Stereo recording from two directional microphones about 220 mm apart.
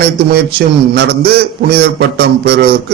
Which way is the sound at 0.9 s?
45° right (ahead or behind).